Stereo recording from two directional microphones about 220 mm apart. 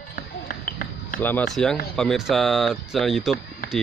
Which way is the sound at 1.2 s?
5° left (ahead or behind).